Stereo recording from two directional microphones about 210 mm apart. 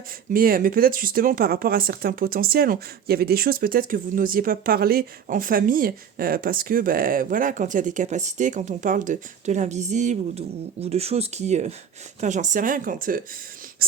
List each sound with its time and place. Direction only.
0.3 s speech: 45° right (ahead or behind)